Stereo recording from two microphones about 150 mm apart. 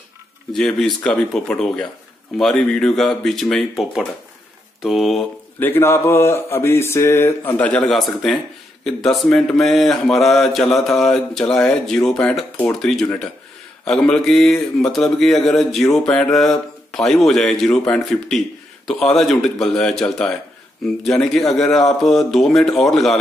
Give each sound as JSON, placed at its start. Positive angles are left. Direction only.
{"t": 0.5, "sound": "a man's voice", "side_deg": 5}
{"t": 5.6, "sound": "a man's voice", "side_deg": 15}